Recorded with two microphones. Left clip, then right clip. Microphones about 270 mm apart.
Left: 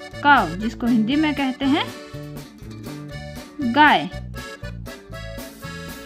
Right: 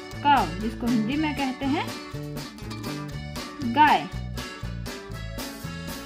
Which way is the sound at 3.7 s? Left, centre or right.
Left.